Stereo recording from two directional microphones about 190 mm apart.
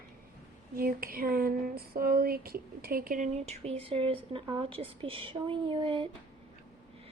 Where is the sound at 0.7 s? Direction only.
50° right (ahead or behind); by 4.4 s 30° right (ahead or behind).